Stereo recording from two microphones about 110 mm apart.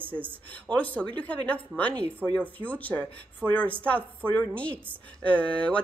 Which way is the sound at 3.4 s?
20° right (ahead or behind).